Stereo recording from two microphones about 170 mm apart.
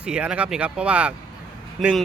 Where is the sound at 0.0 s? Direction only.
5° right (ahead or behind).